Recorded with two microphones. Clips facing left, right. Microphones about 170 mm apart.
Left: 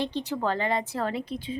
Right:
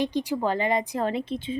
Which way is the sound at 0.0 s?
10° right (ahead or behind).